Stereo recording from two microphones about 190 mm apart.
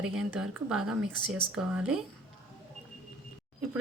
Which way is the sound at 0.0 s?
5° right (ahead or behind).